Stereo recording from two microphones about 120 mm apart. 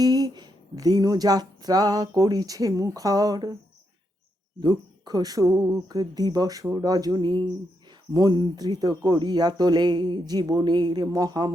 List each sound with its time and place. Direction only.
0.0 s speech: 35° right (ahead or behind)
4.6 s speech: 35° right (ahead or behind)